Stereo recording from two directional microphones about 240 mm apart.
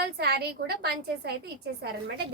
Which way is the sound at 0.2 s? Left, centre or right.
Right.